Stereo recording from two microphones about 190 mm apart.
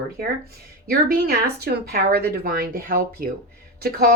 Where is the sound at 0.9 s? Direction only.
55° right (ahead or behind).